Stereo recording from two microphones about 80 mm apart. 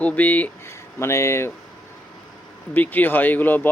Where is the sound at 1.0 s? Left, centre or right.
Left.